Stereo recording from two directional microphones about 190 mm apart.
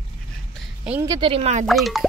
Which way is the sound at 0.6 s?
5° right (ahead or behind).